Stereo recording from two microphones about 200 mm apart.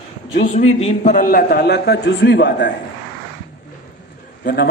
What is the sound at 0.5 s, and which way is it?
A man's voice, 35° left (ahead or behind).